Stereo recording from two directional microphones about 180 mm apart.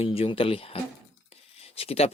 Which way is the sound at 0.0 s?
30° left (ahead or behind).